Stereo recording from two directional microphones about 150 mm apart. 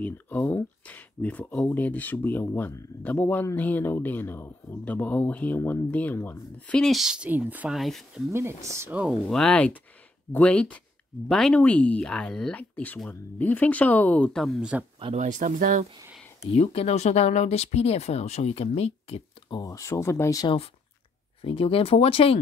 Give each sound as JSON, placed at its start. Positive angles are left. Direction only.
{"t": 0.0, "sound": "speech", "side_deg": 10}
{"t": 7.7, "sound": "speech", "side_deg": 0}
{"t": 8.3, "sound": "speech", "side_deg": -15}
{"t": 9.0, "sound": "speech", "side_deg": 0}
{"t": 15.1, "sound": "speech", "side_deg": -55}
{"t": 16.3, "sound": "speech", "side_deg": 45}
{"t": 19.5, "sound": "speech", "side_deg": 20}
{"t": 21.4, "sound": "speech", "side_deg": 35}